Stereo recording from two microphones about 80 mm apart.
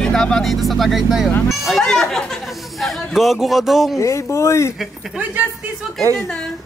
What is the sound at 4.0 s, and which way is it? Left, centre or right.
Speech, left.